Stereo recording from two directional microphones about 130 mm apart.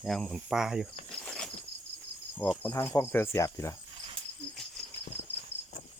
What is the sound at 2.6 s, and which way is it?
Speech, 15° left (ahead or behind).